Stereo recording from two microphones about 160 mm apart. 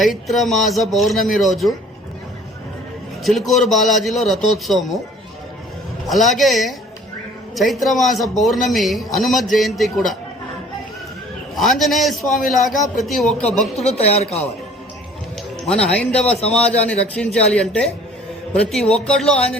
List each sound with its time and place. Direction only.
0.0 s a man's voice: centre (ahead or behind)
3.2 s a man's voice: centre (ahead or behind)
6.1 s a man's voice: centre (ahead or behind)
11.5 s a man's voice: centre (ahead or behind)
13.4 s speech: 40° left (ahead or behind)
15.6 s a man's voice: 5° left (ahead or behind)